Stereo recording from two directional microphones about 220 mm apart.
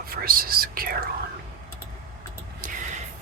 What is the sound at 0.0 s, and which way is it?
Speech, 40° right (ahead or behind).